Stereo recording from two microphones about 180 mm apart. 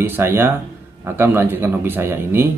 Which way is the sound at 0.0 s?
10° right (ahead or behind).